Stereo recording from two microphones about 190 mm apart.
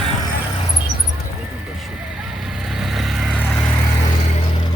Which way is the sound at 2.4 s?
Centre (ahead or behind).